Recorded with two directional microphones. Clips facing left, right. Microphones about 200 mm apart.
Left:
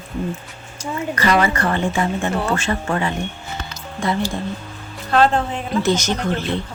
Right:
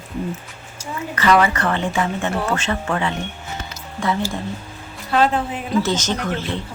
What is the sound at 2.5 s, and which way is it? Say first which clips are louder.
Speech: left 1 dB; 10° left (ahead or behind).